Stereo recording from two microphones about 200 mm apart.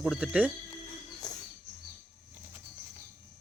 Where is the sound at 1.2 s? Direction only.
20° left (ahead or behind).